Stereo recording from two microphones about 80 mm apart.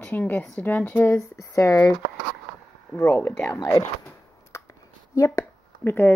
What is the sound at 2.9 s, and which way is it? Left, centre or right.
Speech, left.